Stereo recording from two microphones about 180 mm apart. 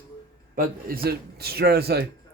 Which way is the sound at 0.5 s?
55° right (ahead or behind).